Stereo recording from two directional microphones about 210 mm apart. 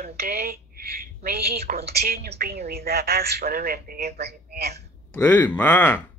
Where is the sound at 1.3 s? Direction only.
50° right (ahead or behind).